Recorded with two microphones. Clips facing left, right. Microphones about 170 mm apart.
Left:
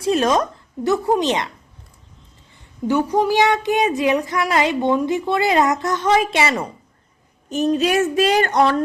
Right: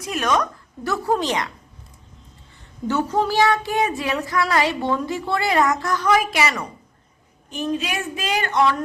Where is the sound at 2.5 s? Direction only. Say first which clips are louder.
Left 4 dB; 15° left (ahead or behind).